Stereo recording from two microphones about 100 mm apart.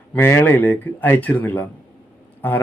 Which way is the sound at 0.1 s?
20° left (ahead or behind).